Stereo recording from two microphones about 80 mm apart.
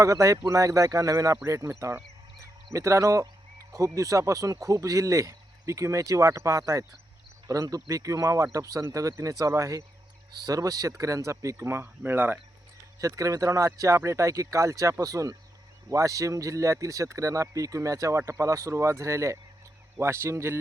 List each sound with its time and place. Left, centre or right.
0.0 s speech: right
13.0 s speech: right